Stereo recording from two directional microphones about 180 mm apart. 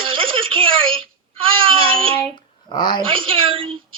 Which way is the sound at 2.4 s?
25° left (ahead or behind).